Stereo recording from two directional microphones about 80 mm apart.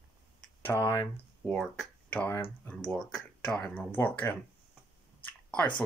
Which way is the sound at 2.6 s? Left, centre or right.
Centre.